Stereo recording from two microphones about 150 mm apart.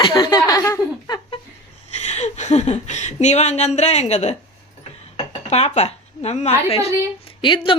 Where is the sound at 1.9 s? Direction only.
50° left (ahead or behind).